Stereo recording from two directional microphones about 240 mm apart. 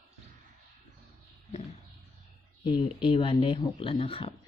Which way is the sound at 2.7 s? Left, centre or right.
Left.